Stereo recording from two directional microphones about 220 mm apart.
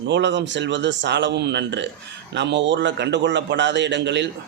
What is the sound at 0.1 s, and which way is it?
A man's voice, 55° right (ahead or behind).